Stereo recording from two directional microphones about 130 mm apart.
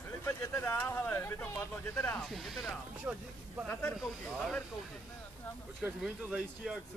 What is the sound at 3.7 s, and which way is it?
Speech, 15° left (ahead or behind).